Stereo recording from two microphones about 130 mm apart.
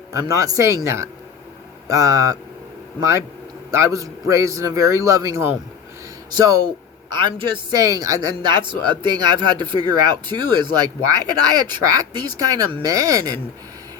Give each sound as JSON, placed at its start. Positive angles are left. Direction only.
{"t": 0.1, "sound": "a man's voice", "side_deg": -25}